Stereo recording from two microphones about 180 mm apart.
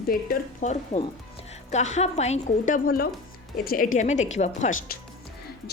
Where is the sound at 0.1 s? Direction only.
45° left (ahead or behind).